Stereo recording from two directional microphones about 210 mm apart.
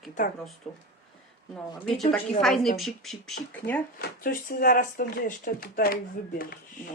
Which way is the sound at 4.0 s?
40° left (ahead or behind).